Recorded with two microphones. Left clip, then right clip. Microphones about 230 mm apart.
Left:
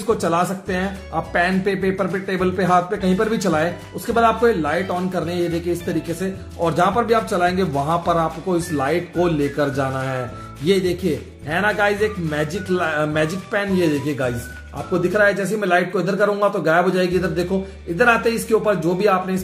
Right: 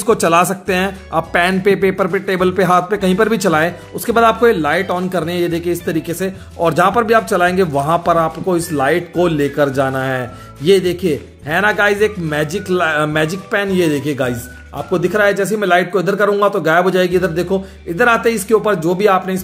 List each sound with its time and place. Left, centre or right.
0.0 s speech: right